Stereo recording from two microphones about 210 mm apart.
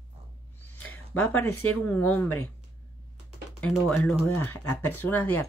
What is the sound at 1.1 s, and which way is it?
Speech, 5° left (ahead or behind).